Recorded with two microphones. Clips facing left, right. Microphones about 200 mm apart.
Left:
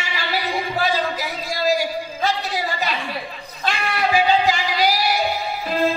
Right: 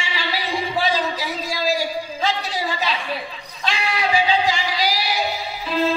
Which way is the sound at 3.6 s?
55° left (ahead or behind).